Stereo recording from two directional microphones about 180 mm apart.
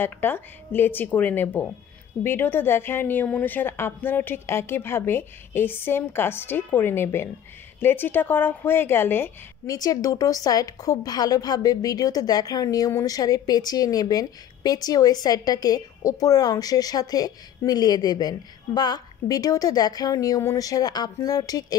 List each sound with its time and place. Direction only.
0.0 s a woman's voice: 10° left (ahead or behind)